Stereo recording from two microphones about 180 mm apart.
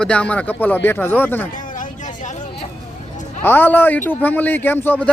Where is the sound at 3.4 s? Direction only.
10° left (ahead or behind).